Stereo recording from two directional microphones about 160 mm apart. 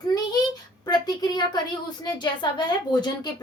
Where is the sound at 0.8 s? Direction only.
25° left (ahead or behind).